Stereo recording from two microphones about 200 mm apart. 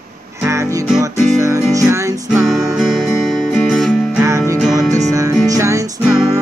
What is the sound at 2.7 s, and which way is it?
Music, centre (ahead or behind).